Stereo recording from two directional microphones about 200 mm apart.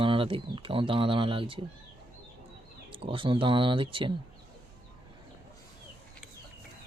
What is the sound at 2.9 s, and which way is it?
Speech, 25° right (ahead or behind).